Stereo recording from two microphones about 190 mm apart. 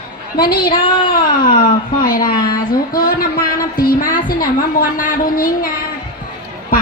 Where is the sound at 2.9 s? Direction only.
50° left (ahead or behind).